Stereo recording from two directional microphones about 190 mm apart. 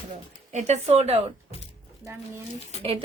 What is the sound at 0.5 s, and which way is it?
Speech, 35° right (ahead or behind).